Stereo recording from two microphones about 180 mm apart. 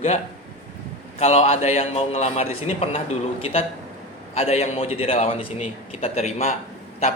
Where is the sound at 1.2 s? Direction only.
35° left (ahead or behind).